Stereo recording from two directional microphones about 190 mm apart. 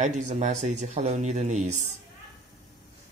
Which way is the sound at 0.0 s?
40° right (ahead or behind).